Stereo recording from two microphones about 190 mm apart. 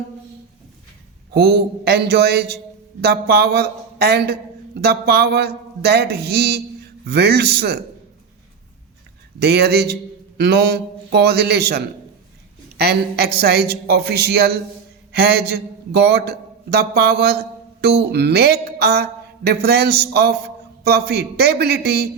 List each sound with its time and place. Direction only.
1.3 s speech: 60° right (ahead or behind)
9.4 s a man's voice: 60° right (ahead or behind)